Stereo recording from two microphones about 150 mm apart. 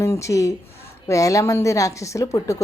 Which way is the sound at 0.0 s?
20° left (ahead or behind).